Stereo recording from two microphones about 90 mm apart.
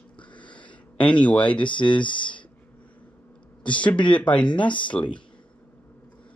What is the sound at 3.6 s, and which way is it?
A man's voice, 15° left (ahead or behind).